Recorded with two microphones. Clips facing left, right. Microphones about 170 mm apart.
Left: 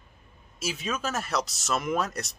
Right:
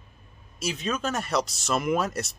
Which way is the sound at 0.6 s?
5° left (ahead or behind).